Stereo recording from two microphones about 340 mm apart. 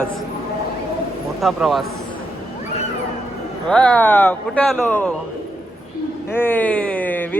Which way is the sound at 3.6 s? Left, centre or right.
Centre.